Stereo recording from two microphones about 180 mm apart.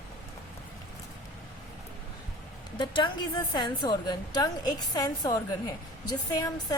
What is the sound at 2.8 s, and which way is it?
A woman's voice, 25° left (ahead or behind).